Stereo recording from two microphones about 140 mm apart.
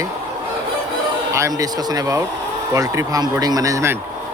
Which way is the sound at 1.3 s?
20° right (ahead or behind).